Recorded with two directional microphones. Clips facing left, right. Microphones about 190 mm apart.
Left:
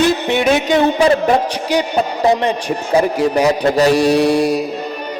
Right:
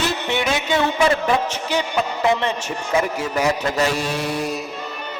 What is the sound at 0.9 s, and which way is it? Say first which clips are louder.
Speech: left 5 dB; 35° left (ahead or behind).